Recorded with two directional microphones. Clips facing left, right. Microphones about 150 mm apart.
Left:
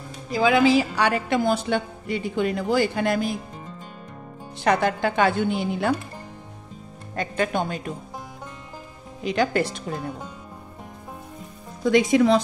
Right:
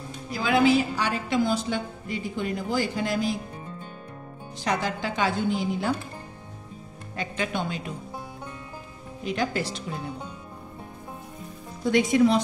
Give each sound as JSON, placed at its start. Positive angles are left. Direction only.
{"t": 0.7, "sound": "a woman's voice", "side_deg": 80}
{"t": 4.6, "sound": "a woman's voice", "side_deg": 60}
{"t": 7.2, "sound": "speech", "side_deg": 50}
{"t": 9.2, "sound": "a woman's voice", "side_deg": 85}
{"t": 11.8, "sound": "speech", "side_deg": 90}